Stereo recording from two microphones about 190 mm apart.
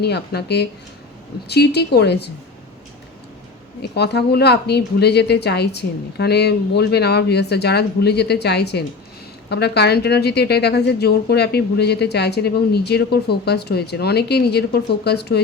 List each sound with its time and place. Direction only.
0.0 s speech: 60° left (ahead or behind)
3.8 s speech: 60° left (ahead or behind)